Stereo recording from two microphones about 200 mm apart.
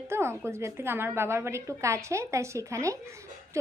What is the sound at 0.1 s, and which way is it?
A woman's voice, 10° right (ahead or behind).